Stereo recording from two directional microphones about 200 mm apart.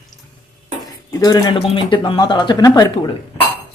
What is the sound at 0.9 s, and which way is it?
Dishes, 20° left (ahead or behind).